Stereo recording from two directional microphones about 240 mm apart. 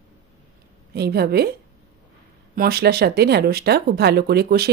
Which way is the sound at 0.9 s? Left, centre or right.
Right.